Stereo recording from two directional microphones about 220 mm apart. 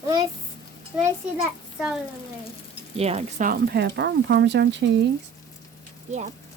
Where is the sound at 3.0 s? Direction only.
30° right (ahead or behind); by 4.9 s 50° right (ahead or behind).